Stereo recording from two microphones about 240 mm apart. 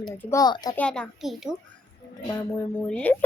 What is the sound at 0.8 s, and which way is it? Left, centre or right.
A woman's voice, centre.